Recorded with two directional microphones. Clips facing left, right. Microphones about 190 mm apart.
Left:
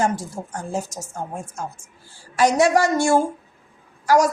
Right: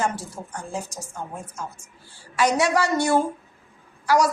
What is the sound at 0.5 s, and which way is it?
A woman's voice, 40° left (ahead or behind).